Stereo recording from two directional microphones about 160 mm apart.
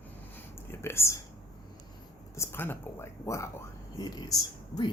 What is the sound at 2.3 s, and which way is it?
Speech, 15° left (ahead or behind).